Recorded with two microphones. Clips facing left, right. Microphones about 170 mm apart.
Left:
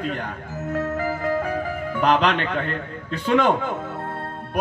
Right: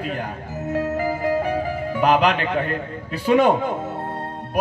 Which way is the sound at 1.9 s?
10° right (ahead or behind).